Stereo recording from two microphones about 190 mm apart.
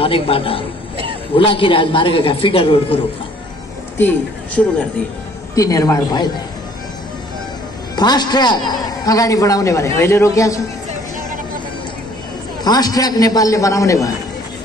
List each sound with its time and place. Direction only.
0.0 s a man's voice: 30° left (ahead or behind)
5.5 s a man's voice: 15° left (ahead or behind)
7.9 s a man's voice: 20° left (ahead or behind)
12.6 s a man's voice: 20° left (ahead or behind)